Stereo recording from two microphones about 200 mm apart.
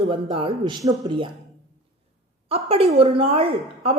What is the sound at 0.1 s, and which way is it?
A woman's voice, 25° right (ahead or behind).